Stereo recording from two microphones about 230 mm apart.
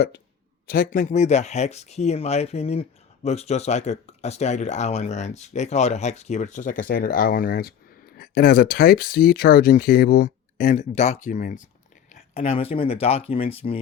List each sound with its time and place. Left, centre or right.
0.7 s speech: left